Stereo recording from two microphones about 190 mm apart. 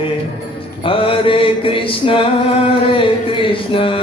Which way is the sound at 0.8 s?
25° left (ahead or behind).